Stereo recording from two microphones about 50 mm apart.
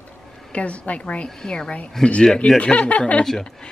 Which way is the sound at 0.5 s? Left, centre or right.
Left.